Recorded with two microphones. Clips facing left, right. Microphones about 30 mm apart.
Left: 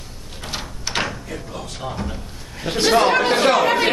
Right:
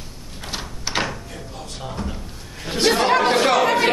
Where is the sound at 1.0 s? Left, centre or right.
Centre.